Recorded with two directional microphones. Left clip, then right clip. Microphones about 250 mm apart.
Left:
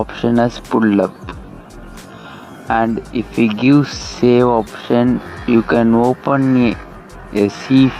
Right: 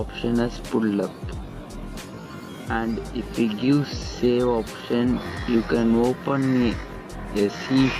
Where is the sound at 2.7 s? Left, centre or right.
Left.